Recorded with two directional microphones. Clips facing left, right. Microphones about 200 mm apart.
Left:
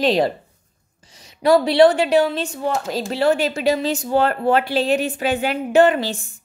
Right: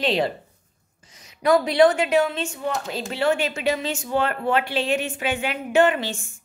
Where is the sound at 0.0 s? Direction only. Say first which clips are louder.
Left 5 dB; 40° left (ahead or behind).